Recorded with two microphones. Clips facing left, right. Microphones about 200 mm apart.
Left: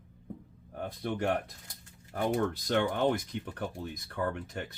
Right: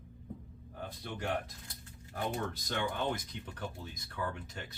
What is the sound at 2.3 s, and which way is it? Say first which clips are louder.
Speech: left 8 dB; 65° left (ahead or behind).